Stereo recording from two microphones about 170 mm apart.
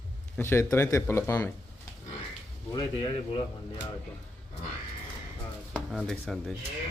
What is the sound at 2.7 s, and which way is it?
Speech, 25° left (ahead or behind).